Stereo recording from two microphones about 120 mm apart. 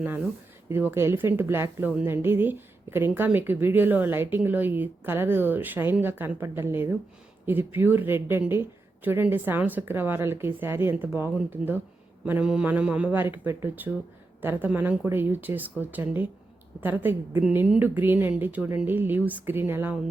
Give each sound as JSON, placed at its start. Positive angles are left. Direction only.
{"t": 0.7, "sound": "a woman's voice", "side_deg": -20}